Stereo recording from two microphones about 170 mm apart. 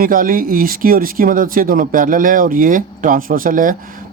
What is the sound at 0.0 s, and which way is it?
Speech, 55° right (ahead or behind).